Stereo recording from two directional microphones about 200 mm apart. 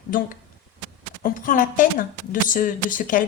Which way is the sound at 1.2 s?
40° left (ahead or behind).